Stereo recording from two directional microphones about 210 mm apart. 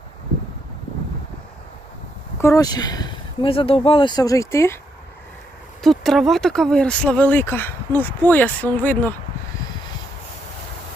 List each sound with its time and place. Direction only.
2.4 s speech: 15° left (ahead or behind)
5.8 s speech: centre (ahead or behind)